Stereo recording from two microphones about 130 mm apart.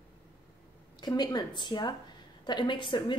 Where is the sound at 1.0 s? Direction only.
35° left (ahead or behind).